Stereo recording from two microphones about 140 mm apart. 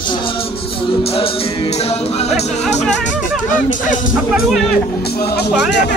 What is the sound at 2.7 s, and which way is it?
Speech, 55° left (ahead or behind).